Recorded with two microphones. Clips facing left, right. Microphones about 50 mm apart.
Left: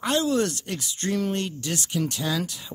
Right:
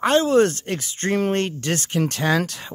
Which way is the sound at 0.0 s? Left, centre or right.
Right.